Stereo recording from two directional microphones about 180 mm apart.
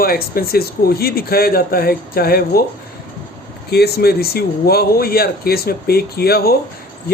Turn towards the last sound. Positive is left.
turn(degrees=60)  # may be behind; listen again after turning